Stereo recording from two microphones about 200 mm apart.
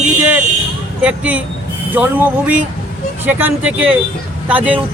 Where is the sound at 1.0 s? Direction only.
5° right (ahead or behind).